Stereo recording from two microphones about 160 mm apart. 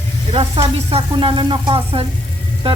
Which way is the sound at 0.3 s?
40° right (ahead or behind).